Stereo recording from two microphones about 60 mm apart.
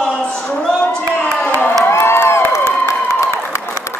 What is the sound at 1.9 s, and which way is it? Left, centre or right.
Crowd, left.